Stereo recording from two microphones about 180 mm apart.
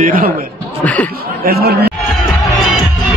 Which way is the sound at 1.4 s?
60° right (ahead or behind).